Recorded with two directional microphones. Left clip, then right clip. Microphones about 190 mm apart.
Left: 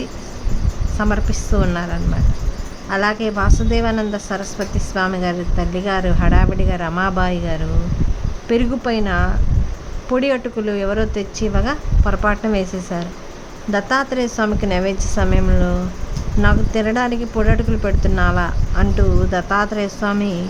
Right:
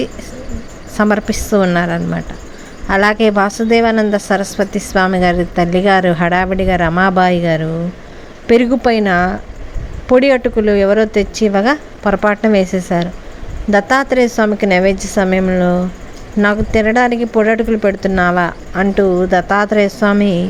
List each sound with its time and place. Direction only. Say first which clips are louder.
0.9 s a woman's voice: right 8 dB; 35° right (ahead or behind)